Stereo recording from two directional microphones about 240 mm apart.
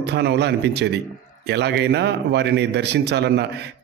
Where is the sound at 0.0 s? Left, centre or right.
Right.